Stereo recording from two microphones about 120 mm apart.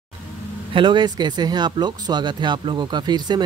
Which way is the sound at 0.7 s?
40° right (ahead or behind).